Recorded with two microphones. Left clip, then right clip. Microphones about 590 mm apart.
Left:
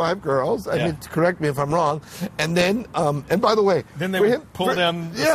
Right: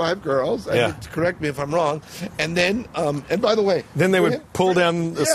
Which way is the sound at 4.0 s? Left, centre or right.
Right.